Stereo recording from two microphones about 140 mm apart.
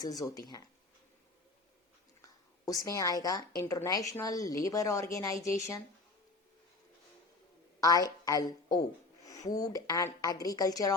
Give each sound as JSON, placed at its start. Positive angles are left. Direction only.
{"t": 0.0, "sound": "a woman's voice", "side_deg": 25}
{"t": 2.2, "sound": "a woman's voice", "side_deg": 25}
{"t": 7.8, "sound": "a woman's voice", "side_deg": 25}